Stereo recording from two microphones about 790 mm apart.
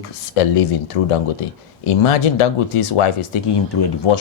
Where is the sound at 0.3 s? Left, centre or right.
Left.